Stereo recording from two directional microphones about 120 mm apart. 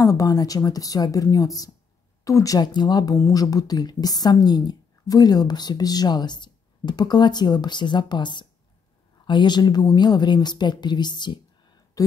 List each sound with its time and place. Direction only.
0.0 s a woman's voice: 30° left (ahead or behind)